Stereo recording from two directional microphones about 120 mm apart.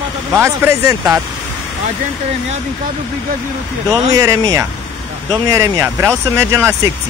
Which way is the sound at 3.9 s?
30° right (ahead or behind).